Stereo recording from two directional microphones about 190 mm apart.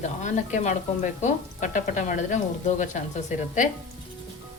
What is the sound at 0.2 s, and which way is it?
Speech, 40° left (ahead or behind).